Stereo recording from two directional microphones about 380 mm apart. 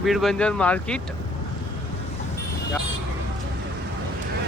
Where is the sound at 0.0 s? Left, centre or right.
Centre.